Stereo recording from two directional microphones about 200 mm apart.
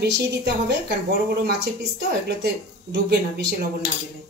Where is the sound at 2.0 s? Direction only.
55° right (ahead or behind).